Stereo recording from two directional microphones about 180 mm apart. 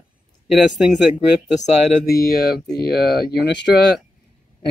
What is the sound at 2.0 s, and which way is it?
Speech, 60° left (ahead or behind).